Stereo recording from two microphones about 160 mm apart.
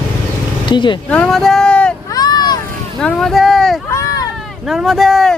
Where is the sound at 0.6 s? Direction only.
30° left (ahead or behind).